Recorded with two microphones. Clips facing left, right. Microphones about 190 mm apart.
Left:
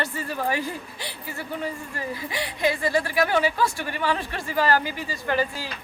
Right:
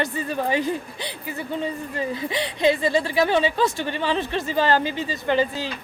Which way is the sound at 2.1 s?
20° right (ahead or behind).